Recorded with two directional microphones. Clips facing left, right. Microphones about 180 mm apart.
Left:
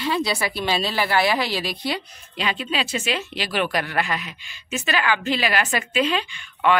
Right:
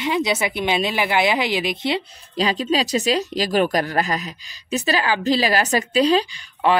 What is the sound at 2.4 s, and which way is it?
Speech, 35° right (ahead or behind).